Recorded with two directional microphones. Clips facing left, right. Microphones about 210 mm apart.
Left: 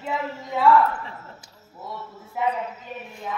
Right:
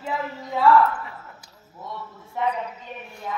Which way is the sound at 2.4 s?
5° left (ahead or behind).